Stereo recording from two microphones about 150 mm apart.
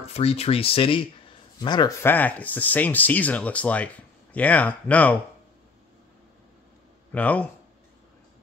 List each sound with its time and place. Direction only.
0.0 s speech: 45° left (ahead or behind); by 5.1 s 10° left (ahead or behind)
7.1 s speech: 10° left (ahead or behind)